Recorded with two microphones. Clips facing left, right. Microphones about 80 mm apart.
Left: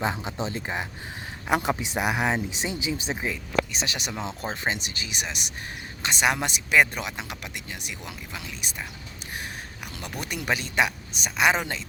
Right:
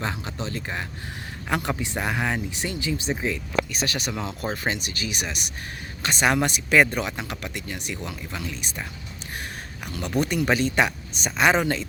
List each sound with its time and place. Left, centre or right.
0.0 s speech: centre
10.2 s speech: centre